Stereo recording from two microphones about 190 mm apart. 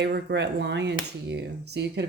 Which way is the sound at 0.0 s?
60° right (ahead or behind).